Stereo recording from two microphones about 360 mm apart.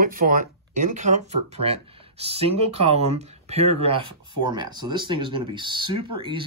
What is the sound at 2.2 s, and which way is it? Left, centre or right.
Speech, centre.